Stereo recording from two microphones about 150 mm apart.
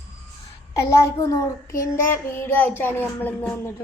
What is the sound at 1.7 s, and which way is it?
Child singing, 20° left (ahead or behind).